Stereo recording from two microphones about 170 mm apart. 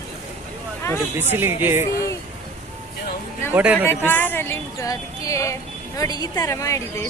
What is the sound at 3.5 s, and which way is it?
Speech, 10° right (ahead or behind).